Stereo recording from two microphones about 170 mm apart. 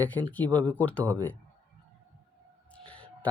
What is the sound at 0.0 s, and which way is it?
Speech, 10° left (ahead or behind).